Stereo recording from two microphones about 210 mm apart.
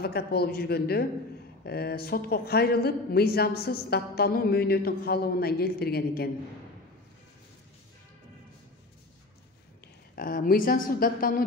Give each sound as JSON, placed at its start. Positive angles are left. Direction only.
{"t": 0.0, "sound": "speech", "side_deg": 50}
{"t": 10.1, "sound": "speech", "side_deg": 40}